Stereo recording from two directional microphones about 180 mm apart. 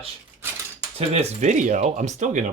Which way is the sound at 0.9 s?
35° right (ahead or behind).